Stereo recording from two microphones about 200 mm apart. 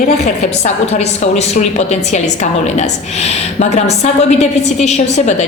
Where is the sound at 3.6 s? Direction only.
30° left (ahead or behind).